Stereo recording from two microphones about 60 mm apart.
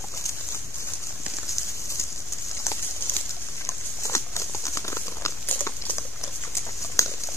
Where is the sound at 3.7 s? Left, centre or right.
Left.